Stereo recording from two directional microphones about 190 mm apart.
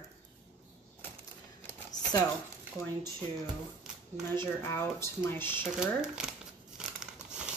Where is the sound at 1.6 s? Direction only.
15° left (ahead or behind).